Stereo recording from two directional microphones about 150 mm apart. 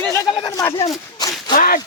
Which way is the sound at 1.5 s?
70° left (ahead or behind).